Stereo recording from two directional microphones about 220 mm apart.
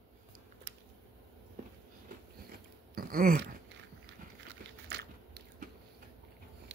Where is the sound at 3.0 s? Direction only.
40° right (ahead or behind).